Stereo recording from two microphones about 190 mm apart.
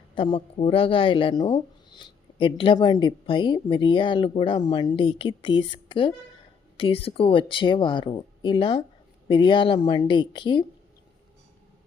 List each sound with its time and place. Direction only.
0.1 s a woman's voice: 25° left (ahead or behind)